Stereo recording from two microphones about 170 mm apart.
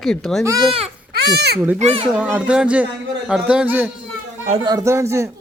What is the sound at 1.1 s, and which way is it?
Speech, 75° right (ahead or behind).